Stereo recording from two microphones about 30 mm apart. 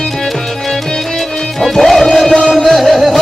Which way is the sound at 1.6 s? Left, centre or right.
Centre.